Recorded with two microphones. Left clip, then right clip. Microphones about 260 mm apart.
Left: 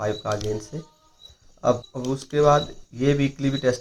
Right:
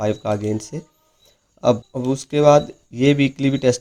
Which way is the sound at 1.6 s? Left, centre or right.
Right.